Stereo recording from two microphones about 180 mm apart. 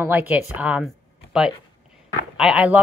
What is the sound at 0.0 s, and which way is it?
Speech, 10° right (ahead or behind).